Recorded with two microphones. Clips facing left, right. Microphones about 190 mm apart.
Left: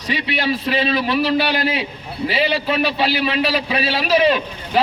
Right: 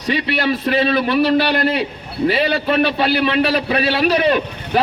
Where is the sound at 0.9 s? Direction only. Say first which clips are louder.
Right 3 dB; 55° right (ahead or behind).